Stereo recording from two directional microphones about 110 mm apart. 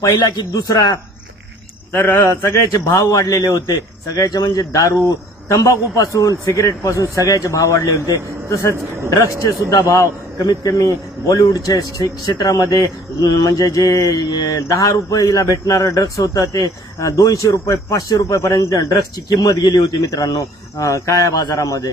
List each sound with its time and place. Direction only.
0.4 s mantra: 40° left (ahead or behind)
1.9 s a man's voice: 20° left (ahead or behind)
4.1 s mantra: 35° left (ahead or behind)
5.5 s a man's voice: 30° left (ahead or behind)
7.2 s mantra: 30° left (ahead or behind)
8.7 s a man's voice: 25° right (ahead or behind)
9.2 s a man's voice: 30° left (ahead or behind)
10.4 s mantra: 35° left (ahead or behind)